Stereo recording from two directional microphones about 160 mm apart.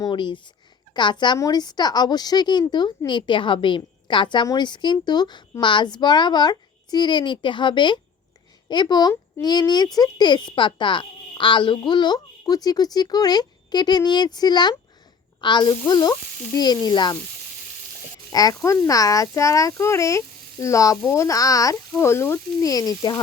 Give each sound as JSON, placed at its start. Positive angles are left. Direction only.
{"t": 0.0, "sound": "a woman's voice", "side_deg": 30}
{"t": 18.3, "sound": "a woman's voice", "side_deg": 25}